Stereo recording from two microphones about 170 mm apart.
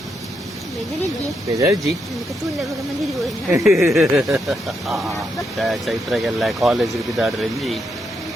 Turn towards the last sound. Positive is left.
turn(degrees=0)  # may be behind; listen again after turning